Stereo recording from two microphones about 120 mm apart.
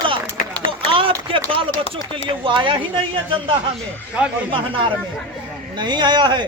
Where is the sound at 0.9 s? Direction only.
45° right (ahead or behind).